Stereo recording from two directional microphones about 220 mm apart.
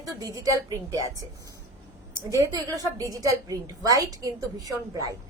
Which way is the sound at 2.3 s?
15° right (ahead or behind).